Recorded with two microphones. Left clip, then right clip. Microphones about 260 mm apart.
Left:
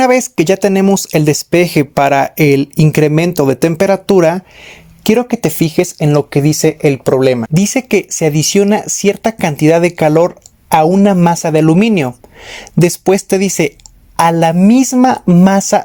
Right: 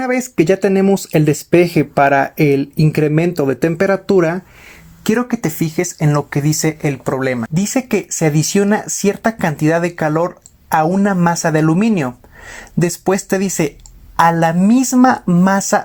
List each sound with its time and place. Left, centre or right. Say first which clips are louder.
0.0 s speech: left 6 dB; left